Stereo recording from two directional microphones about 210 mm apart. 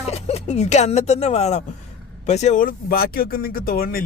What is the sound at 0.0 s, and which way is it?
A man's voice, 30° left (ahead or behind).